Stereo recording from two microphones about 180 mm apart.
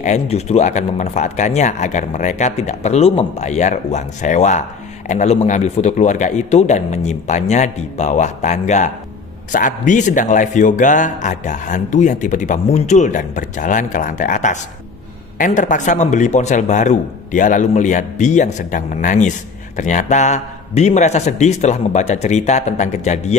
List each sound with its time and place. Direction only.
0.0 s a man's voice: 40° left (ahead or behind)